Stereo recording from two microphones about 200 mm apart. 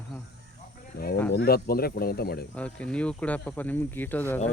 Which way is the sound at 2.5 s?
5° left (ahead or behind).